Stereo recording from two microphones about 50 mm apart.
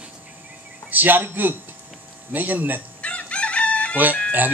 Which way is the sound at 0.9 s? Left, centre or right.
Right.